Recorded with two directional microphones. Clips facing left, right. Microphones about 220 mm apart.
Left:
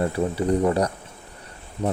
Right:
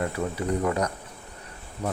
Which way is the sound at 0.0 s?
30° left (ahead or behind).